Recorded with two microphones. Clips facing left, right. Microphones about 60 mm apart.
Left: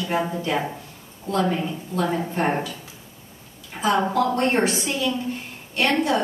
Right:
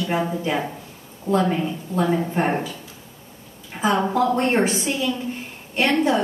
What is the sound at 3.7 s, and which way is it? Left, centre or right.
Speech, centre.